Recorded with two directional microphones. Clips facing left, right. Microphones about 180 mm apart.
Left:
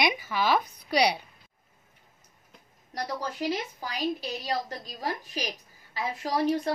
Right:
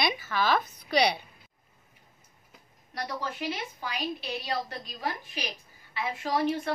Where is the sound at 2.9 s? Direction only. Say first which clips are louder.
Left 2 dB; 40° left (ahead or behind).